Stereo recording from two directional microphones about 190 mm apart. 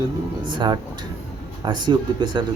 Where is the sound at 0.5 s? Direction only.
25° right (ahead or behind).